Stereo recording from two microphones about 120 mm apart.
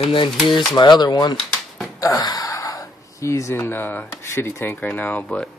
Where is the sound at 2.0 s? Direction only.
30° left (ahead or behind).